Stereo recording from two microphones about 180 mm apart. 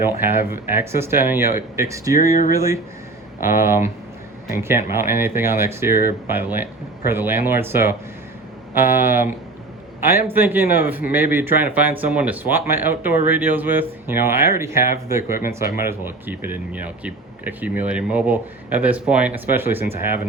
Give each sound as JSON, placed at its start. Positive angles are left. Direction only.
{"t": 0.0, "sound": "speech", "side_deg": -10}